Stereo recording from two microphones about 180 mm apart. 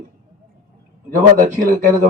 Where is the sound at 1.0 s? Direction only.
45° right (ahead or behind).